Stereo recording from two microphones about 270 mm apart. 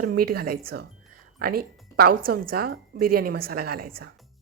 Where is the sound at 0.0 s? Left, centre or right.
Right.